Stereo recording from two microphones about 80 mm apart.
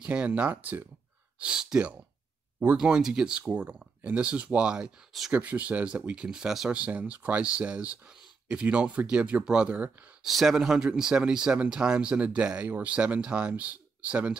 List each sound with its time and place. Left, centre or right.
0.0 s speech: centre
1.4 s speech: centre
6.8 s speech: centre
10.2 s speech: centre